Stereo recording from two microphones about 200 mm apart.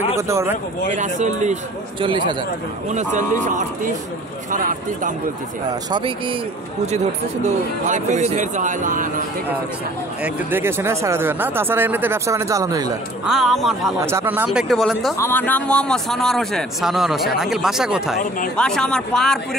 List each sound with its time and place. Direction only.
0.1 s speech: 15° right (ahead or behind)
0.9 s speech: 35° right (ahead or behind)
2.9 s speech: 35° right (ahead or behind)
5.9 s speech: 25° right (ahead or behind)
7.4 s speech: 35° right (ahead or behind)
10.2 s speech: 10° right (ahead or behind)
13.2 s a man's voice: centre (ahead or behind)
13.9 s a man's voice: 15° right (ahead or behind)
15.1 s a man's voice: 10° left (ahead or behind)